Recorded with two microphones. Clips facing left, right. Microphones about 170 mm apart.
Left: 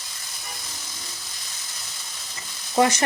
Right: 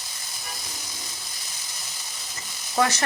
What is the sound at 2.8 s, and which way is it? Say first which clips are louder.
Speech: left 4 dB; 15° left (ahead or behind).